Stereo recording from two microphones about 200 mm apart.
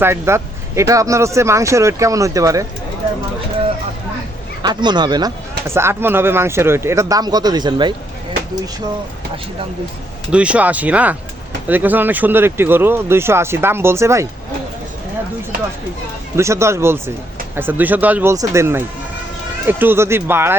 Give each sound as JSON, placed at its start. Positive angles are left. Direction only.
{"t": 0.0, "sound": "speech", "side_deg": -10}
{"t": 4.6, "sound": "speech", "side_deg": -20}
{"t": 10.3, "sound": "speech", "side_deg": -5}
{"t": 16.3, "sound": "speech", "side_deg": -15}